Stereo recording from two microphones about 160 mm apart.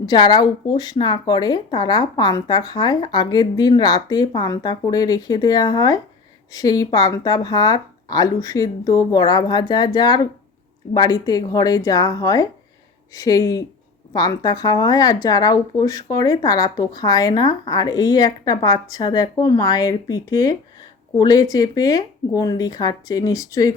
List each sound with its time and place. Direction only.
0.0 s speech: 25° left (ahead or behind)